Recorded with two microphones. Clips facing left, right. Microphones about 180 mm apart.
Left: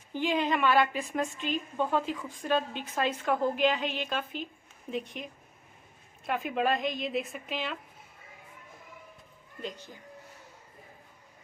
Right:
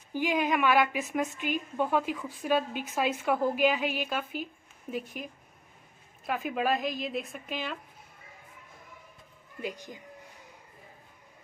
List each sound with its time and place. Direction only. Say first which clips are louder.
0.1 s a woman's voice: right 1 dB; 10° right (ahead or behind)
9.6 s a woman's voice: right 3 dB; 10° right (ahead or behind)